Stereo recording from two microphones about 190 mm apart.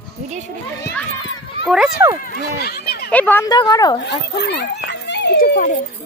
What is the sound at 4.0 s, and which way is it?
Speech, 60° left (ahead or behind).